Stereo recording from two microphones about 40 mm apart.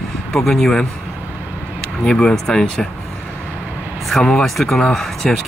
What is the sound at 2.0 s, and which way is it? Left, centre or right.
Speech, left.